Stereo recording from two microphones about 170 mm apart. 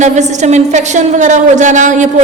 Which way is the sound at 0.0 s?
45° right (ahead or behind).